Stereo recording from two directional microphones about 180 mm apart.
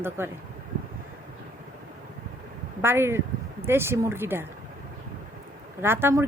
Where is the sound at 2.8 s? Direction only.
15° right (ahead or behind).